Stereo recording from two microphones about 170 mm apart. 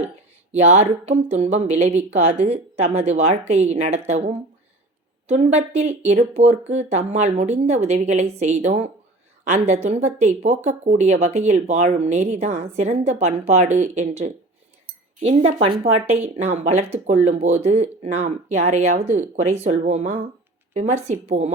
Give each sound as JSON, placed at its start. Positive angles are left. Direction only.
{"t": 0.5, "sound": "speech", "side_deg": -40}